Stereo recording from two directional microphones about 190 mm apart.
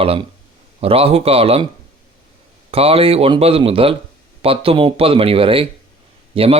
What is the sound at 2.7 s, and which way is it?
Speech, 30° right (ahead or behind).